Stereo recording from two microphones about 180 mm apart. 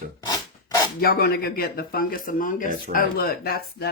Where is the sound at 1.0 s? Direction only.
55° left (ahead or behind).